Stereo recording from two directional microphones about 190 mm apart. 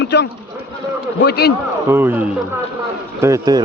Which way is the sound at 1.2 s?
60° left (ahead or behind).